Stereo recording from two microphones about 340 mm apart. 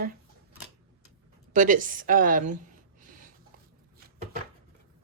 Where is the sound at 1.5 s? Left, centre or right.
Right.